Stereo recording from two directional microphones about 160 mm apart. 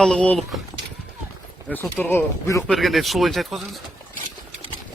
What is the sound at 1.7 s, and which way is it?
Speech, 10° left (ahead or behind).